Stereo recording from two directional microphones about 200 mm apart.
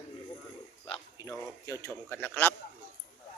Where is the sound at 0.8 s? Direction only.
20° left (ahead or behind).